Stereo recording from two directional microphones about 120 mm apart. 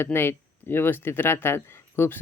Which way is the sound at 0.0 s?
20° left (ahead or behind).